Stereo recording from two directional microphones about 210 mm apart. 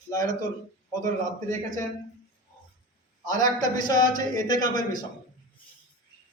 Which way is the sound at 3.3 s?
15° left (ahead or behind).